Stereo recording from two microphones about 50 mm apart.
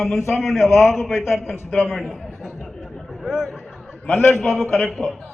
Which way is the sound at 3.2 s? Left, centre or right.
Centre.